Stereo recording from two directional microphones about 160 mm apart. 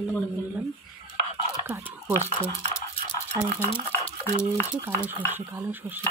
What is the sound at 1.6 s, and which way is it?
Speech, 15° right (ahead or behind).